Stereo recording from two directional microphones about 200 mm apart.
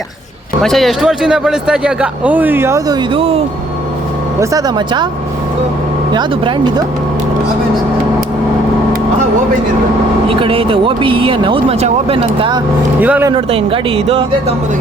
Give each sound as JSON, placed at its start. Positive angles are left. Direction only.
{"t": 0.6, "sound": "speech", "side_deg": 0}
{"t": 10.2, "sound": "speech", "side_deg": -25}
{"t": 13.0, "sound": "speech", "side_deg": -10}
{"t": 13.3, "sound": "speech", "side_deg": -25}